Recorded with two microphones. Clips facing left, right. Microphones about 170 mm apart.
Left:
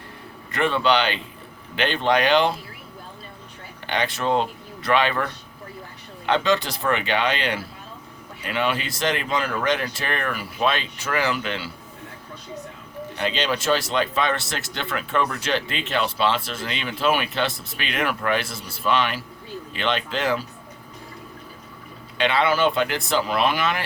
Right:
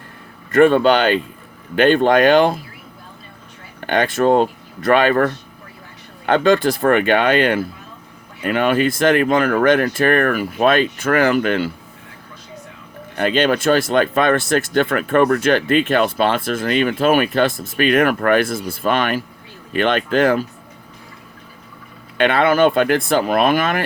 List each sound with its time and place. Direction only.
0.5 s speech: 50° right (ahead or behind)
3.8 s speech: 50° right (ahead or behind)
13.1 s speech: 50° right (ahead or behind)
22.2 s speech: 50° right (ahead or behind)